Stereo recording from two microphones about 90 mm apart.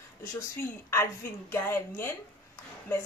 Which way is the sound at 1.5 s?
30° left (ahead or behind).